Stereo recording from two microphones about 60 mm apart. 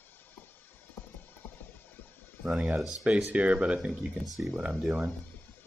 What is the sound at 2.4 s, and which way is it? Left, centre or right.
Speech, centre.